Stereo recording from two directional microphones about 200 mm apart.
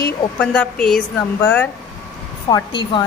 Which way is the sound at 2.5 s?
25° left (ahead or behind).